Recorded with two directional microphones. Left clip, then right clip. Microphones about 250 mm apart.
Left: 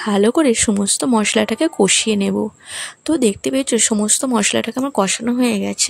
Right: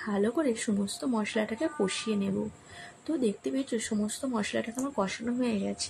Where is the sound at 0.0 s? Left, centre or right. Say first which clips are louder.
Left 14 dB; left.